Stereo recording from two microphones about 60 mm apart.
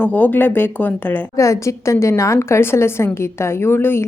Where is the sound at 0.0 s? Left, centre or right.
Left.